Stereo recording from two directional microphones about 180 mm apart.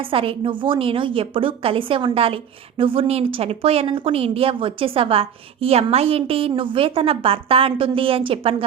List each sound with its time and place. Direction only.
0.1 s a woman's voice: 30° right (ahead or behind)